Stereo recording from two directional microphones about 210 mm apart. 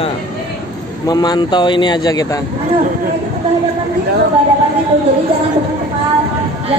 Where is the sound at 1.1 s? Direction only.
20° left (ahead or behind).